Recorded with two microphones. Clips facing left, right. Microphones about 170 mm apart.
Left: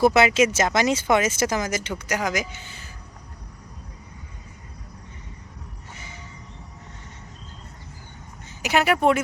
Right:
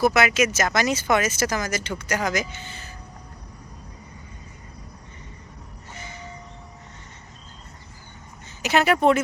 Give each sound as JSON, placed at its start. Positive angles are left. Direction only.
{"t": 0.0, "sound": "speech", "side_deg": 30}
{"t": 8.6, "sound": "speech", "side_deg": 10}